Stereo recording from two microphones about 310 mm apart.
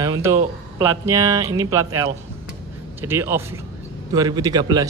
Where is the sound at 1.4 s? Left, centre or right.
Centre.